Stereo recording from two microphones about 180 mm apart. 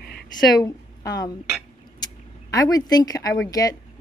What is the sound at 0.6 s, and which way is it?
Speech, 20° left (ahead or behind).